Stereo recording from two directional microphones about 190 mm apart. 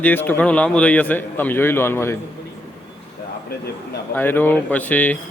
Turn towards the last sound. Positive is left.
turn(degrees=10)  # may be behind; listen again after turning